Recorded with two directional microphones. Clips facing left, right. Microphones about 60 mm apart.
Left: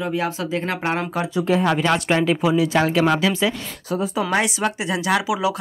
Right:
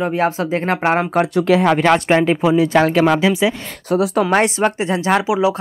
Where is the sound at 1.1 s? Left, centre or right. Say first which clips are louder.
Right 6 dB; right.